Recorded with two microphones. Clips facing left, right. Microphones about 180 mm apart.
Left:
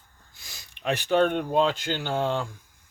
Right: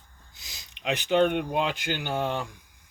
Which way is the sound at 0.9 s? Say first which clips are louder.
Even; 15° right (ahead or behind).